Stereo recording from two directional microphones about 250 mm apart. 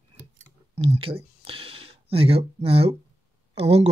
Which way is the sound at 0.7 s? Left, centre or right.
Right.